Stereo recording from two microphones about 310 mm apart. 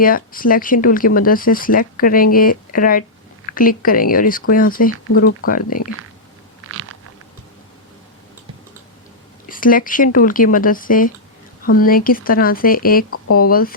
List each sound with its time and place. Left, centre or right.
0.0 s speech: left
6.7 s crunch: right
9.5 s speech: left
13.1 s speech: left
13.4 s speech: left